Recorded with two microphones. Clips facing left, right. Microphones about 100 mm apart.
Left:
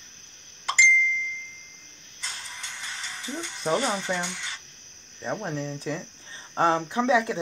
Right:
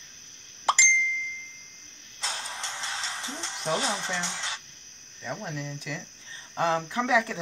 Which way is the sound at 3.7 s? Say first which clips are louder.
Left 4 dB; 90° right.